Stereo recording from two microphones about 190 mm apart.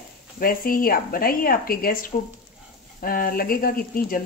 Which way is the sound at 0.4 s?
50° left (ahead or behind).